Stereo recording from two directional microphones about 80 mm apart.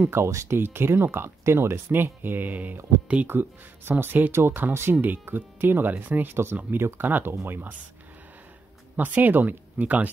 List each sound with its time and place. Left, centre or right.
0.0 s speech: right
8.9 s speech: right